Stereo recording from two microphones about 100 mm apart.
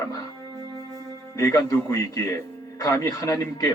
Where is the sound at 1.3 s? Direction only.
30° left (ahead or behind).